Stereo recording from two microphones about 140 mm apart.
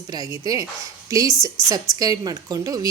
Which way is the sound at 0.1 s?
25° right (ahead or behind).